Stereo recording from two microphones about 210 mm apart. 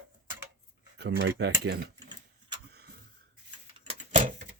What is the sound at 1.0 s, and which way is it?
Speech, 55° right (ahead or behind).